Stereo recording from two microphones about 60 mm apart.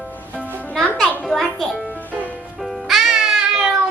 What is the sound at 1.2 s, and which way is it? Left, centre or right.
Music, centre.